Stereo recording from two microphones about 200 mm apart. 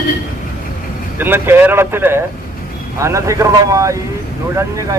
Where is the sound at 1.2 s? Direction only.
10° right (ahead or behind).